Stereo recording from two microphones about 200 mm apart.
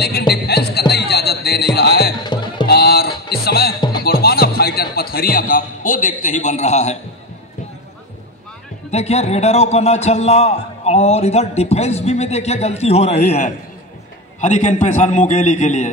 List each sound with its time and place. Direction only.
0.3 s music: 50° left (ahead or behind)
2.2 s music: 20° left (ahead or behind)
2.7 s a sound: 55° left (ahead or behind)
4.0 s music: 50° left (ahead or behind); by 7.0 s 35° left (ahead or behind)
8.9 s a man's voice: 30° left (ahead or behind)